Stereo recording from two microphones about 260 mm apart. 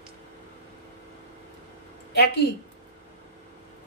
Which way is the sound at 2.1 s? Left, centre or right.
Left.